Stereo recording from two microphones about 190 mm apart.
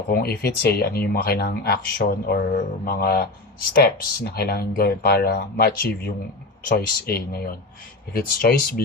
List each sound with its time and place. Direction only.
0.1 s speech: 55° left (ahead or behind)